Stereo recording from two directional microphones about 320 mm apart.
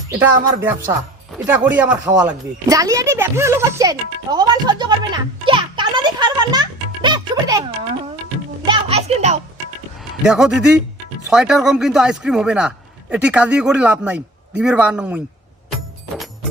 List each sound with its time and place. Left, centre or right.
0.2 s speech: centre
5.5 s music: centre
8.6 s music: centre
10.2 s speech: centre